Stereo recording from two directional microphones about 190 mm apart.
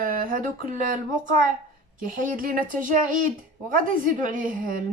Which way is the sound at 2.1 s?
45° right (ahead or behind).